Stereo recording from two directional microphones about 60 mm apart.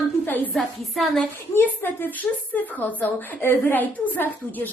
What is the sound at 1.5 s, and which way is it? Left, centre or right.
A woman's voice, left.